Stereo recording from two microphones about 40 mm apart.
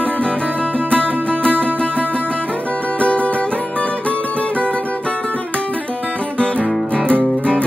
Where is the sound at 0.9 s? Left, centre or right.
Left.